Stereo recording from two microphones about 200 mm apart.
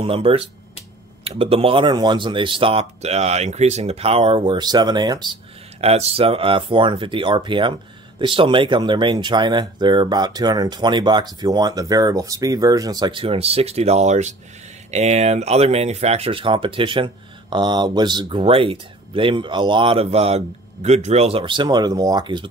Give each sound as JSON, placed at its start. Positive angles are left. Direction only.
{"t": 0.0, "sound": "speech", "side_deg": -30}